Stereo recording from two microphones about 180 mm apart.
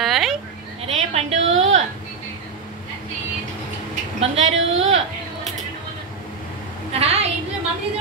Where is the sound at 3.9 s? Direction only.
35° right (ahead or behind).